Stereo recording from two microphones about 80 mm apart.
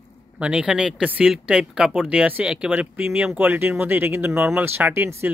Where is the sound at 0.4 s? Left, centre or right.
Centre; by 4.3 s right.